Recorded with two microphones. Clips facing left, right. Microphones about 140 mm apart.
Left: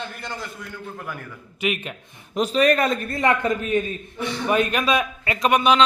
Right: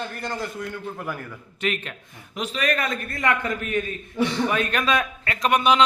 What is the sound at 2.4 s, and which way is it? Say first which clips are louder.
A man's voice: left 7 dB; 35° left (ahead or behind).